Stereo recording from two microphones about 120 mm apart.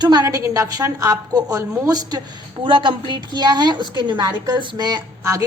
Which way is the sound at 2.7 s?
45° right (ahead or behind).